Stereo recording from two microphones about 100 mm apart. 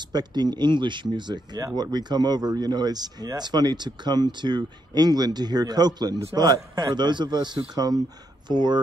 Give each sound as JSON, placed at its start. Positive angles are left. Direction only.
{"t": 0.0, "sound": "speech", "side_deg": -45}